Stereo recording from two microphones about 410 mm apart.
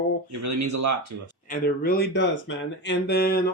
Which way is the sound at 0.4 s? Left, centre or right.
Right.